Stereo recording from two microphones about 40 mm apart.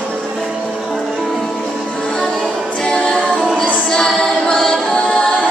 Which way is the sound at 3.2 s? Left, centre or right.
Centre.